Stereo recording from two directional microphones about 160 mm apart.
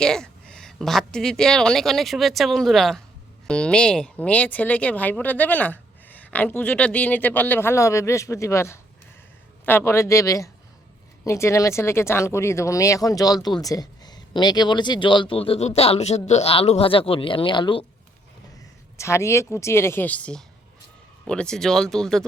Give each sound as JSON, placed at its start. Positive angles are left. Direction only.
{"t": 0.0, "sound": "speech", "side_deg": 5}
{"t": 18.9, "sound": "speech", "side_deg": 20}